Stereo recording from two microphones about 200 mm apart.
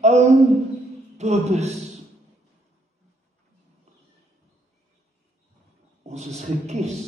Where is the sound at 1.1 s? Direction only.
35° right (ahead or behind).